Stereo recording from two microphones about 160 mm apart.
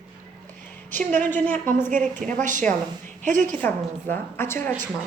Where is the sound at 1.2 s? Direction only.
10° left (ahead or behind).